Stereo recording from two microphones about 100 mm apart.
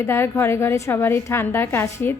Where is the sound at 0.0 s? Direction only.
25° left (ahead or behind).